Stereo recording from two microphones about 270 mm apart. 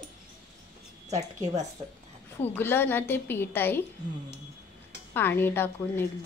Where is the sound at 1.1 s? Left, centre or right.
Right.